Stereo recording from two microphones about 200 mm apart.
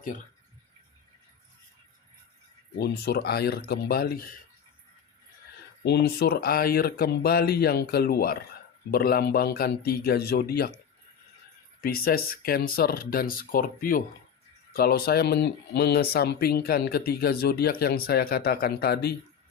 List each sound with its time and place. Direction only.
2.7 s speech: 50° left (ahead or behind)
5.8 s speech: 55° left (ahead or behind)
11.8 s speech: 50° left (ahead or behind)